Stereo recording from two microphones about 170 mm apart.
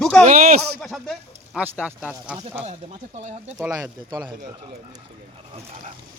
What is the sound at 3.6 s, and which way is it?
Speech, 20° right (ahead or behind).